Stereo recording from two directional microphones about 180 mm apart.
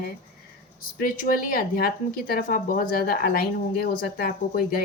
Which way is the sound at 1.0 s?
50° left (ahead or behind).